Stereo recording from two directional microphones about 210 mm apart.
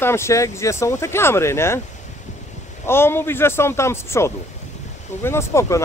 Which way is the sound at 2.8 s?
10° left (ahead or behind).